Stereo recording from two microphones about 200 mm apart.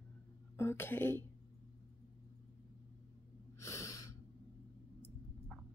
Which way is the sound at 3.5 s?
15° left (ahead or behind).